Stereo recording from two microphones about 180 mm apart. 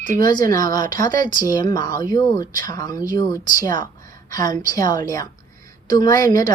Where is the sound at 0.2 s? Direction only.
20° left (ahead or behind).